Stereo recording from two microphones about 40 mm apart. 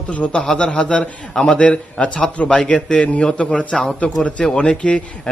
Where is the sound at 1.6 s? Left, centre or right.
Left.